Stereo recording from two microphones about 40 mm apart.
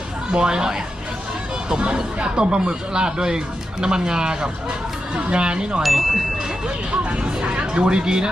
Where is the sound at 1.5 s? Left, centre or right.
Right.